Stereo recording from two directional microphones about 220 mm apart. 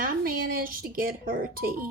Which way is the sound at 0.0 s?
40° right (ahead or behind).